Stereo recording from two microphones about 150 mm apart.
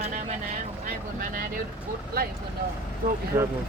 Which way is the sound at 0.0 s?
50° right (ahead or behind).